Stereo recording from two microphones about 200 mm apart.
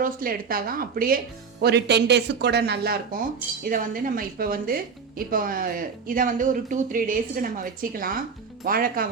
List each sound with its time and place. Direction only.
0.0 s speech: 45° right (ahead or behind)
1.6 s speech: 55° right (ahead or behind)